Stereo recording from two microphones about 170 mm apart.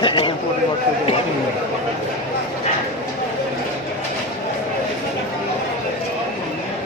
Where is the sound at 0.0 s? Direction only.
30° left (ahead or behind).